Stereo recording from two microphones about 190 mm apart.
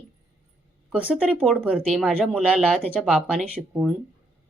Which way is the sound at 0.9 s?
5° right (ahead or behind).